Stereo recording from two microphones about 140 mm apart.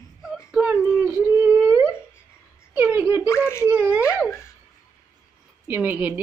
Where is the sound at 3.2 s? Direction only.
20° left (ahead or behind).